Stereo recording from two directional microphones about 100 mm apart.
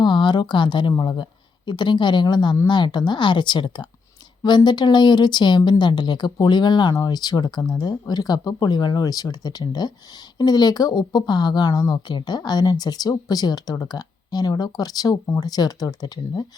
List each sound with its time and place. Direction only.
0.0 s speech: 50° left (ahead or behind)